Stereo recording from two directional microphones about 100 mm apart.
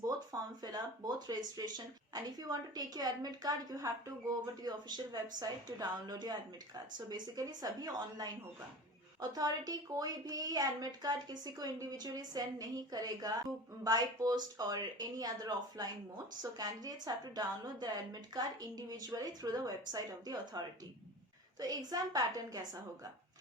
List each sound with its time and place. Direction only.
0.0 s speech: 40° right (ahead or behind)
9.3 s speech: 40° right (ahead or behind)